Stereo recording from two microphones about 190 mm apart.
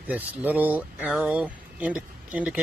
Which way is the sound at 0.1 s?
10° right (ahead or behind).